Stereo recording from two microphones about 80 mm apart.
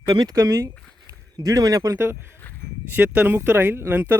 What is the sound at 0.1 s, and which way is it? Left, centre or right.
Speech, right.